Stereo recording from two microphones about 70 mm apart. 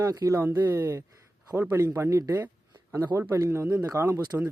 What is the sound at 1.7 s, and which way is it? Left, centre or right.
Speech, right.